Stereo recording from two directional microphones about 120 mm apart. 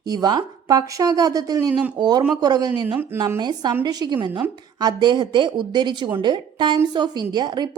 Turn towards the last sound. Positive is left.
turn(degrees=-35)  # may be behind; listen again after turning